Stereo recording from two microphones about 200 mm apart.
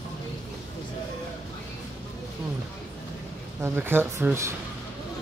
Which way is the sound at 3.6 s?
10° right (ahead or behind).